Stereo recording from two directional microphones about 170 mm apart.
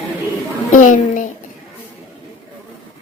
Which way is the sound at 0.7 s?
50° left (ahead or behind).